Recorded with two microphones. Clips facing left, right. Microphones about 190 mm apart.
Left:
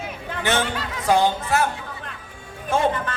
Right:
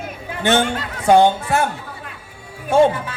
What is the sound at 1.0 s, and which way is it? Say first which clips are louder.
Speech: right 6 dB; 30° right (ahead or behind).